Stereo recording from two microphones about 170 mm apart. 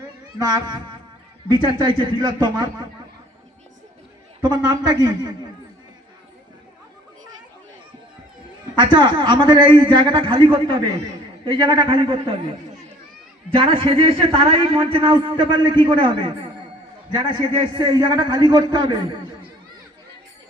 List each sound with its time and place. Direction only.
0.3 s a man's voice: 25° right (ahead or behind)
4.4 s a man's voice: 25° right (ahead or behind)
8.7 s a man's voice: 25° right (ahead or behind)
13.5 s a man's voice: 35° right (ahead or behind)
17.3 s a man's voice: 25° right (ahead or behind)